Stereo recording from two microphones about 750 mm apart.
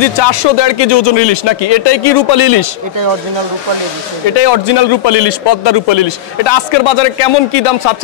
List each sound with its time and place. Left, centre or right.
0.0 s a man's voice: left
4.4 s a man's voice: left